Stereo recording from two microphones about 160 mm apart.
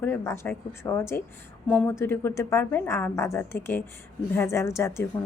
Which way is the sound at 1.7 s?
5° left (ahead or behind).